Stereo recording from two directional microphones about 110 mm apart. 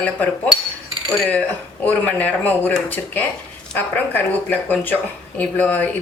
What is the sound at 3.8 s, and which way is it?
Speech, 15° left (ahead or behind).